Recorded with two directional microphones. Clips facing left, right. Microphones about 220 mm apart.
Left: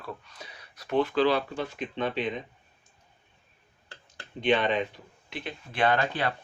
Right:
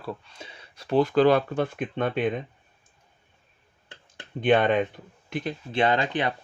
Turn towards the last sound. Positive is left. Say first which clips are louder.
# right 2 dB
turn(degrees=-20)  # may be behind; listen again after turning